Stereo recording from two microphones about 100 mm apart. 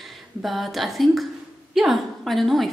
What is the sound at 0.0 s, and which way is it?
A woman's voice, centre (ahead or behind).